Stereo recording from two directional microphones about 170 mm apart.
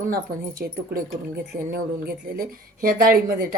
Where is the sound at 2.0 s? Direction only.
60° right (ahead or behind).